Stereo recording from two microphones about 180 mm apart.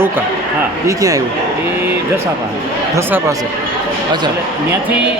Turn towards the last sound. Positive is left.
turn(degrees=-15)  # may be behind; listen again after turning